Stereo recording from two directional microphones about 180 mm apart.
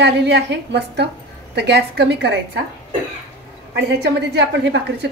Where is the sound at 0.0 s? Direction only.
75° right (ahead or behind).